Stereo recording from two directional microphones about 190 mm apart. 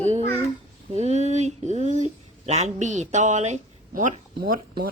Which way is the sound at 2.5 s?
35° right (ahead or behind).